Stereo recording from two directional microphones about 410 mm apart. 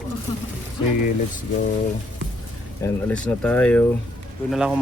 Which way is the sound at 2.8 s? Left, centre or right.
Centre.